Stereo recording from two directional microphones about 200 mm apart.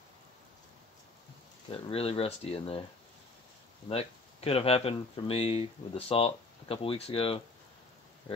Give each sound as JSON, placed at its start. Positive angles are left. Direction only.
{"t": 1.9, "sound": "speech", "side_deg": 30}
{"t": 3.9, "sound": "speech", "side_deg": 30}